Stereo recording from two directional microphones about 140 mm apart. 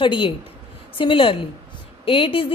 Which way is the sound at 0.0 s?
35° left (ahead or behind).